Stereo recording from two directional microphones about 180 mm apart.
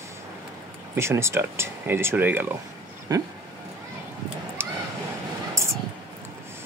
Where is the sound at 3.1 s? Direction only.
20° right (ahead or behind).